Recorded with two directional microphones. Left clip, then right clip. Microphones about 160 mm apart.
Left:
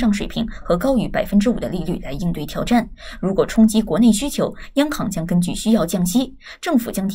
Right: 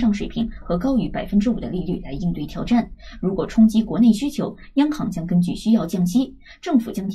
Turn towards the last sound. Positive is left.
turn(degrees=25)  # may be behind; listen again after turning